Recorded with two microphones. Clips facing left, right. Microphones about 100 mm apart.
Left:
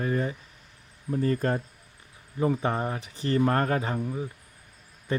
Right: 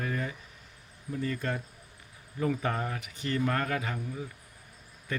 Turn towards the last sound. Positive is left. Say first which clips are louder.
# left 6 dB
turn(degrees=30)  # may be behind; listen again after turning